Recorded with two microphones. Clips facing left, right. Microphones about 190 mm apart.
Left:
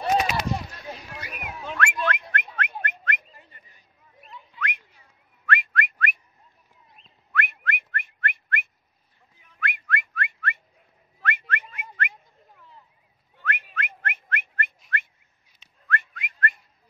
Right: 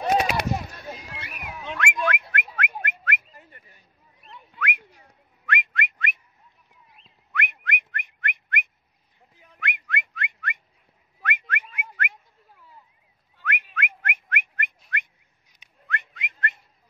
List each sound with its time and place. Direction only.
0.3 s a sound: 55° right (ahead or behind)
0.9 s a sound: centre (ahead or behind)
1.8 s whistling: 15° right (ahead or behind)
4.6 s whistling: 10° right (ahead or behind)
5.5 s whistling: 20° right (ahead or behind)
7.3 s whistling: 15° right (ahead or behind)
13.4 s whistling: 10° right (ahead or behind)